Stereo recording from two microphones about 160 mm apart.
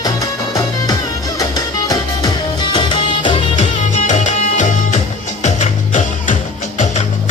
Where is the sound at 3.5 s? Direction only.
50° left (ahead or behind).